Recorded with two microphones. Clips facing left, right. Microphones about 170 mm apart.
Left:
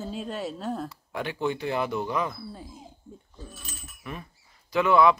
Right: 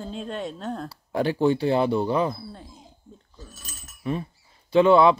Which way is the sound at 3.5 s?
35° right (ahead or behind).